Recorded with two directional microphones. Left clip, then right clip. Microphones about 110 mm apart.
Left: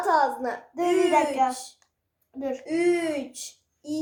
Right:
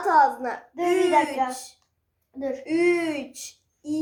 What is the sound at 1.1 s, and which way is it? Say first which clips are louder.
A child's voice: even; 45° left (ahead or behind).